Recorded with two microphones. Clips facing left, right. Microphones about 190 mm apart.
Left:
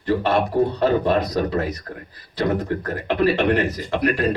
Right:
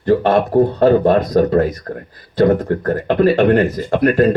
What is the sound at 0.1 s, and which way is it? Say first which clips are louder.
Speech: right 6 dB; 50° right (ahead or behind).